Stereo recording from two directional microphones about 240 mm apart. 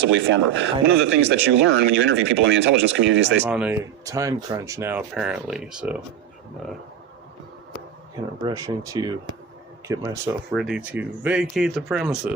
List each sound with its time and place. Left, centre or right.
0.3 s speech: right
3.4 s speech: centre
8.4 s speech: centre
10.5 s speech: centre